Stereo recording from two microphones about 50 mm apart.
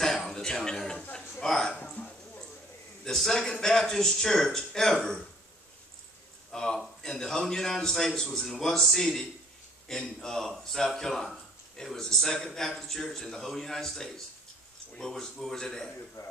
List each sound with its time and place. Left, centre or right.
0.0 s throat clearing: centre
1.4 s a man's voice: centre
3.0 s a man's voice: centre
6.5 s a man's voice: centre
16.2 s speech: left